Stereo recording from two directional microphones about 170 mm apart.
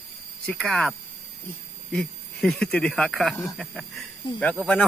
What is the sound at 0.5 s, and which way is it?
Speech, 5° left (ahead or behind).